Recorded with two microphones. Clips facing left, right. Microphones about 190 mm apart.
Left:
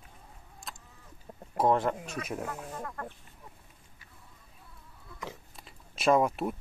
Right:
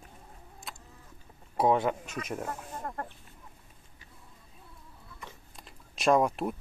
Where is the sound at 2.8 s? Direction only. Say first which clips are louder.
Right 1 dB; 35° right (ahead or behind).